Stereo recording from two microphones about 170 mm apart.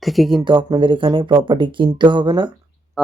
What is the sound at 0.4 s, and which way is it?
Speech, 30° right (ahead or behind).